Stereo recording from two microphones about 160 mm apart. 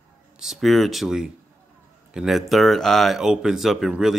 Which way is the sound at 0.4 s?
Centre (ahead or behind).